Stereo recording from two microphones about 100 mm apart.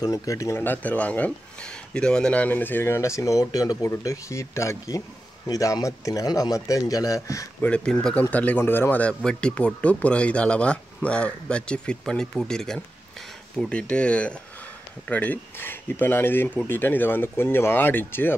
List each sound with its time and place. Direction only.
0.0 s a man's voice: 35° left (ahead or behind)
7.6 s speech: 10° left (ahead or behind)